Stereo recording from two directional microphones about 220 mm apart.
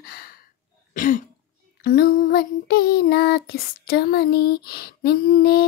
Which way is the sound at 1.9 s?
40° left (ahead or behind).